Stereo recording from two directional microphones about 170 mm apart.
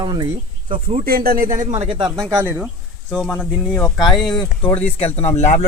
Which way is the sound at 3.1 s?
5° left (ahead or behind).